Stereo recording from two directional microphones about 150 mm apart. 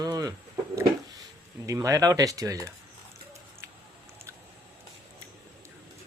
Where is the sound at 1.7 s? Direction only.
20° right (ahead or behind).